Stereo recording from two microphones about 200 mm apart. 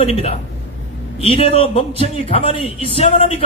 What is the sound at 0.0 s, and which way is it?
A man's voice, 30° left (ahead or behind).